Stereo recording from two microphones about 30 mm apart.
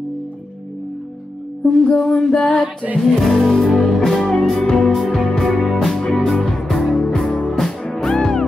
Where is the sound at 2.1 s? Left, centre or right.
Centre.